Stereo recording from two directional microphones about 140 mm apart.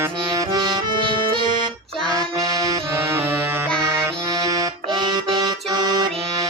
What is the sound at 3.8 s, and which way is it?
Accordion, 25° right (ahead or behind).